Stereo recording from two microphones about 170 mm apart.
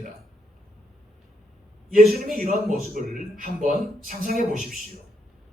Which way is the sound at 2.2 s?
55° right (ahead or behind).